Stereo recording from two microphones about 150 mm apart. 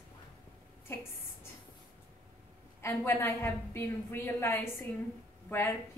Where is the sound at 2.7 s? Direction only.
15° left (ahead or behind).